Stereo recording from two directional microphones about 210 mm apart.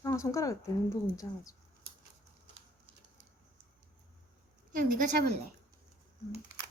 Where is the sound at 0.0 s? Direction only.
15° left (ahead or behind).